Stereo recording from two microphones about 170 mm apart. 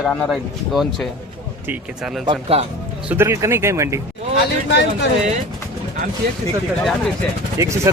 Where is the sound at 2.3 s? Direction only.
35° right (ahead or behind).